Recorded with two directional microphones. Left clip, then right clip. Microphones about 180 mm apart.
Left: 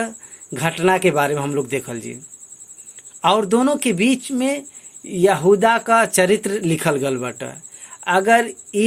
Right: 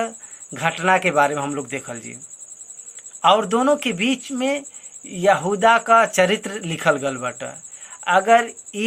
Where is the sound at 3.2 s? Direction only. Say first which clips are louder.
Even; 35° left (ahead or behind).